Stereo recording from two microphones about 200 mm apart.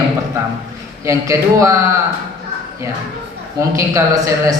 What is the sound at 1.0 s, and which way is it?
Speech, 15° right (ahead or behind).